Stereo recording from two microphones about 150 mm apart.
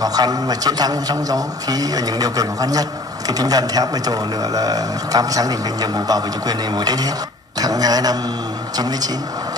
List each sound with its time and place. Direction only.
0.0 s a man's voice: 25° right (ahead or behind)